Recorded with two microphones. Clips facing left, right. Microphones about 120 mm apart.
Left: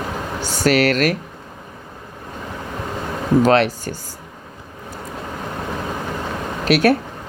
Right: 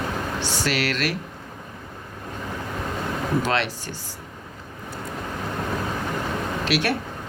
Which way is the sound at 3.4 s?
45° left (ahead or behind).